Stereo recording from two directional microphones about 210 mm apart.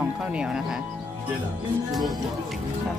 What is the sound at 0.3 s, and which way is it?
Speech, 5° right (ahead or behind).